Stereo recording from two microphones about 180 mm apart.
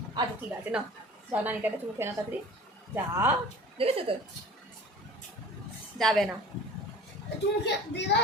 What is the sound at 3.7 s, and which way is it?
Speech, 30° right (ahead or behind).